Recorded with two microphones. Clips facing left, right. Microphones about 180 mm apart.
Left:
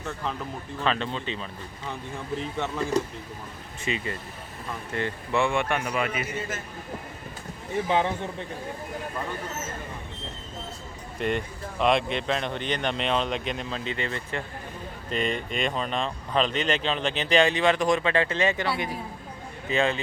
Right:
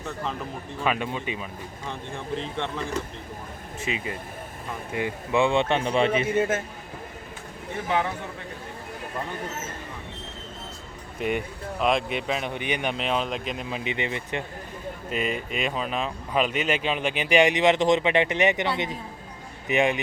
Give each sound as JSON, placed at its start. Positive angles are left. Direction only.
{"t": 0.8, "sound": "speech", "side_deg": -10}
{"t": 1.9, "sound": "speech", "side_deg": 5}
{"t": 6.3, "sound": "a man's voice", "side_deg": -55}
{"t": 7.9, "sound": "a man's voice", "side_deg": 20}
{"t": 11.2, "sound": "speech", "side_deg": -5}
{"t": 15.1, "sound": "speech", "side_deg": -5}